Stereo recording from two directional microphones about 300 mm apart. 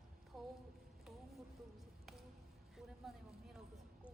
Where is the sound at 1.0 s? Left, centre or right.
Centre.